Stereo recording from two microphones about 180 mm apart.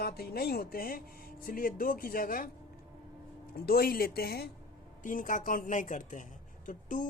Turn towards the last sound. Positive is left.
turn(degrees=45)  # may be behind; listen again after turning